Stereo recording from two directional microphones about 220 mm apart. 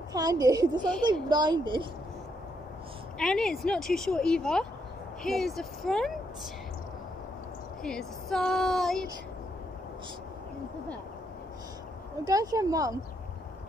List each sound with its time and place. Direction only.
0.1 s speech: 15° right (ahead or behind)
3.2 s speech: 5° left (ahead or behind)
7.8 s speech: centre (ahead or behind)
12.3 s speech: 15° right (ahead or behind)